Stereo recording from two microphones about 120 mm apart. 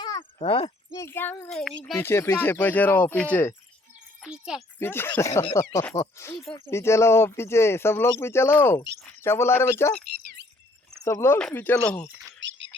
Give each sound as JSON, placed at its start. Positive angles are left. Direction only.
{"t": 0.0, "sound": "a sound", "side_deg": 40}
{"t": 0.3, "sound": "speech", "side_deg": 50}
{"t": 0.9, "sound": "speech", "side_deg": 20}
{"t": 1.5, "sound": "speech", "side_deg": 5}
{"t": 2.0, "sound": "speech", "side_deg": 20}
{"t": 4.2, "sound": "a child's voice", "side_deg": -5}
{"t": 4.8, "sound": "speech", "side_deg": 20}
{"t": 11.0, "sound": "speech", "side_deg": 25}
{"t": 11.3, "sound": "speech", "side_deg": 10}